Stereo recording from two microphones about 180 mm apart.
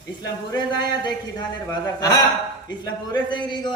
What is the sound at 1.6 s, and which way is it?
A man's voice, 20° left (ahead or behind).